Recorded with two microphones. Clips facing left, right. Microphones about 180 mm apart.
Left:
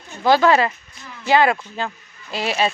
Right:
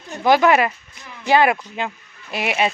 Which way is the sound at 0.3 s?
20° right (ahead or behind).